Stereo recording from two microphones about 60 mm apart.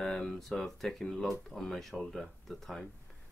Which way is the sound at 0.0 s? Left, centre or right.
Centre.